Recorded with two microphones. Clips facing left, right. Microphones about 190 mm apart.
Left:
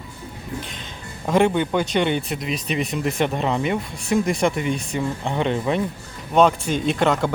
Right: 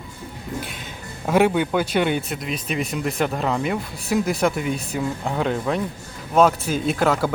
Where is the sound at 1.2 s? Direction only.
5° right (ahead or behind).